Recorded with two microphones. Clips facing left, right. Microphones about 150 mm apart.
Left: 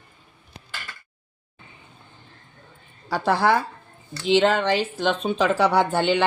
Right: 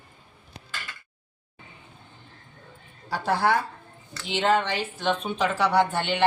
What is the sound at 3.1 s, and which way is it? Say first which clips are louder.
Speech: left 3 dB; 90° left.